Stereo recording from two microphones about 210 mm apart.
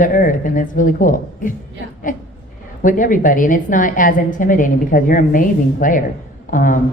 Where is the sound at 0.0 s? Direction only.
40° left (ahead or behind).